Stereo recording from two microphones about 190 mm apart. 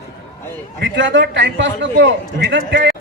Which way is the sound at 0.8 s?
70° right (ahead or behind).